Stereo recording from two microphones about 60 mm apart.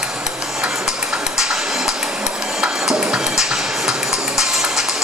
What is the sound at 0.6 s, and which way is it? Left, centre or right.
Music, centre.